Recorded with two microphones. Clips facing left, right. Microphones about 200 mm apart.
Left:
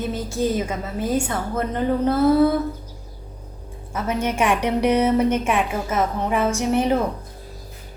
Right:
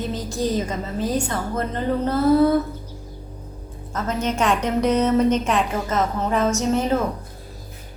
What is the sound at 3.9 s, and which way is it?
A woman's voice, 10° left (ahead or behind).